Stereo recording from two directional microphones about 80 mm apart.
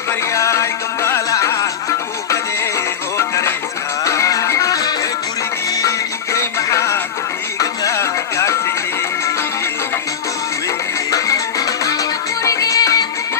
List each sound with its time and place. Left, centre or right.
0.3 s music: left
3.2 s music: left
6.3 s music: left
11.1 s music: left